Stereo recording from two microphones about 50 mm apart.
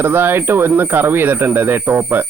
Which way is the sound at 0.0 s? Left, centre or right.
Right.